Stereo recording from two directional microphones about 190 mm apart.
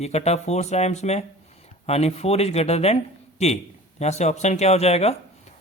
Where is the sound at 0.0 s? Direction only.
35° left (ahead or behind).